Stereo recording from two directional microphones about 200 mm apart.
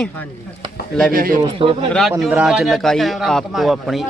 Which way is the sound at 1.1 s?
45° right (ahead or behind).